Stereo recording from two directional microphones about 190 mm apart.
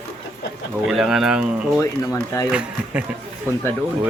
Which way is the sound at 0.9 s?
5° right (ahead or behind).